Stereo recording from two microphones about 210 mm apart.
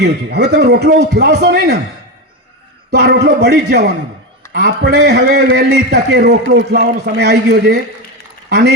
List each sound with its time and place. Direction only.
0.0 s a man's voice: 50° right (ahead or behind)
2.9 s a man's voice: 50° right (ahead or behind)